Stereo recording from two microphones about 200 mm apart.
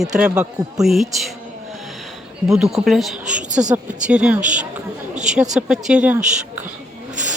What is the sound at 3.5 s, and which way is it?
Speech, 35° right (ahead or behind).